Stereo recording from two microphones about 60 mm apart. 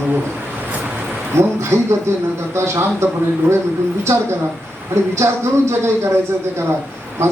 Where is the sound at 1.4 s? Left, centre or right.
Right.